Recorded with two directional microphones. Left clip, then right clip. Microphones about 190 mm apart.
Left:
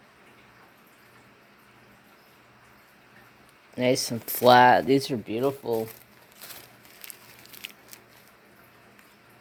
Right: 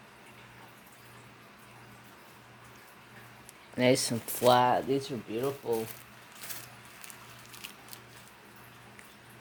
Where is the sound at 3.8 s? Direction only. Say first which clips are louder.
Left 2 dB; 10° left (ahead or behind).